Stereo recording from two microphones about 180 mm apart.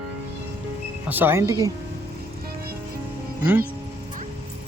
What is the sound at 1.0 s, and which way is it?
Speech, 10° right (ahead or behind).